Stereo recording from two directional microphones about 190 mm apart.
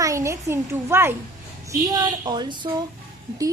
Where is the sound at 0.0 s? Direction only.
15° right (ahead or behind).